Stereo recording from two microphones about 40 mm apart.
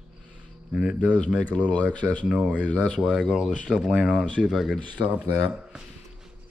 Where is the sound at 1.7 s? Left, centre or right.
Left.